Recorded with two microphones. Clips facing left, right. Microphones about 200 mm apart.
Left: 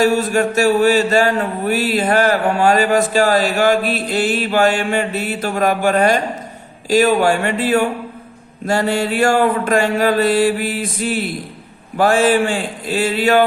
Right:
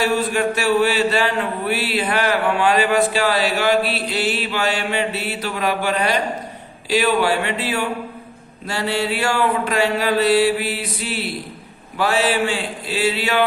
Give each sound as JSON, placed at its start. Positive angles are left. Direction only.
{"t": 0.0, "sound": "mantra", "side_deg": 45}